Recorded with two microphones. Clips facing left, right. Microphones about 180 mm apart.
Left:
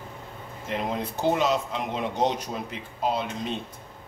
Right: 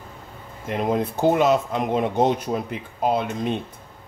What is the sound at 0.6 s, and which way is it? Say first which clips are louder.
Speech: right 6 dB; 50° right (ahead or behind).